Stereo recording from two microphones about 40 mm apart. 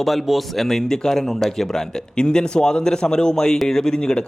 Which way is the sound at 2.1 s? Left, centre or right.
Left.